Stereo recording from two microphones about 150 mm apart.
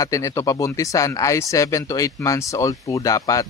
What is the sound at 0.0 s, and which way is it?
Speech, 20° left (ahead or behind).